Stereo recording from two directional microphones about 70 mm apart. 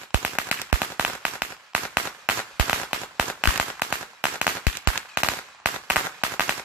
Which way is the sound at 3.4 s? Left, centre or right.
Centre.